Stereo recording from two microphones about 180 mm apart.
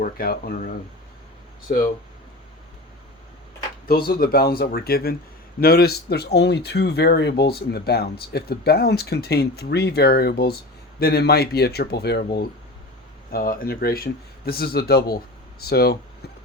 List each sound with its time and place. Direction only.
0.0 s speech: 55° left (ahead or behind)
1.7 s speech: 55° left (ahead or behind)
3.8 s speech: 60° left (ahead or behind)
13.3 s speech: 55° left (ahead or behind)